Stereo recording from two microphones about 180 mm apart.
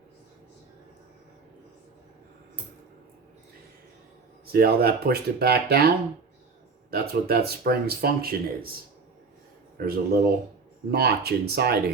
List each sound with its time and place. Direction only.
4.5 s speech: 60° right (ahead or behind)
6.9 s speech: 60° right (ahead or behind)
9.7 s speech: 60° right (ahead or behind)